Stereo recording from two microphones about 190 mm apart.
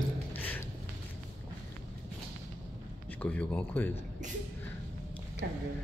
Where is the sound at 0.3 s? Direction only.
10° left (ahead or behind).